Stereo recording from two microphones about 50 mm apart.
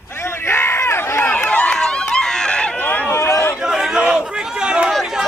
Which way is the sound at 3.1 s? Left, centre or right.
Left.